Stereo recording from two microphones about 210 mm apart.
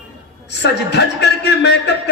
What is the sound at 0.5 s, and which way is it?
A man's voice, 55° left (ahead or behind).